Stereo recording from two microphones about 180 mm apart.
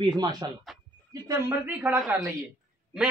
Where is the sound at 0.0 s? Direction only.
25° right (ahead or behind).